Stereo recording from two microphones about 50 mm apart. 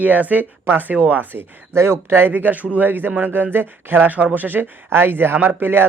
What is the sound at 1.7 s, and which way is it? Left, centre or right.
Speech, right.